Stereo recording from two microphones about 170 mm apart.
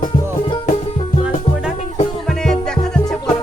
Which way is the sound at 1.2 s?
5° right (ahead or behind).